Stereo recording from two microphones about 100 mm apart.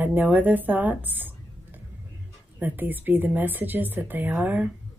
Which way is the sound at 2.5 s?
20° right (ahead or behind).